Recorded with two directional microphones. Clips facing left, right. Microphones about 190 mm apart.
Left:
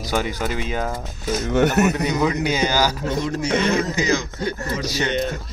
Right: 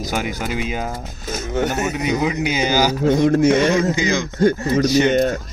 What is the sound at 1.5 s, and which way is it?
Speech, 70° left (ahead or behind).